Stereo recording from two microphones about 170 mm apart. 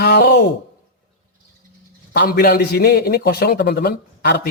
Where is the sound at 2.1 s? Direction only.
65° left (ahead or behind).